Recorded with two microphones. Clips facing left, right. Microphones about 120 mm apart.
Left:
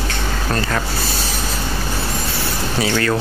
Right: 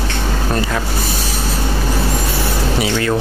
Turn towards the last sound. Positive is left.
turn(degrees=-15)  # may be behind; listen again after turning